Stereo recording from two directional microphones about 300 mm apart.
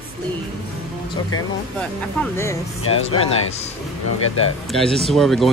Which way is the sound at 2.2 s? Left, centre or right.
Centre.